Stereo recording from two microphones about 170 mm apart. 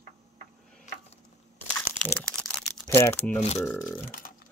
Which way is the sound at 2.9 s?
15° left (ahead or behind).